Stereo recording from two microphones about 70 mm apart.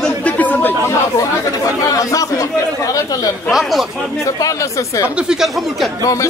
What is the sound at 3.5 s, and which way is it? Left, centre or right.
Speech, centre.